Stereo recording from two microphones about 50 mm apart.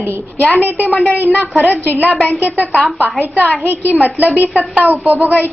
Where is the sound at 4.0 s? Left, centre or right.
Right.